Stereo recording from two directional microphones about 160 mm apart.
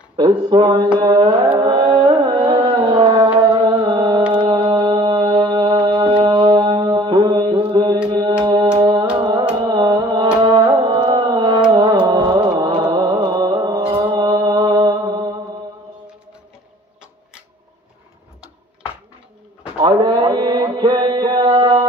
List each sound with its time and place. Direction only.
0.2 s a sound: 25° right (ahead or behind)
1.6 s carnatic music: 25° right (ahead or behind)
4.3 s music: 30° right (ahead or behind)
9.6 s carnatic music: 30° right (ahead or behind)
11.7 s music: 25° right (ahead or behind)
19.8 s mantra: 25° right (ahead or behind)